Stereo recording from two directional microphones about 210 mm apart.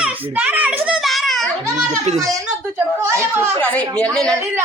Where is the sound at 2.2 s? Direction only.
15° right (ahead or behind).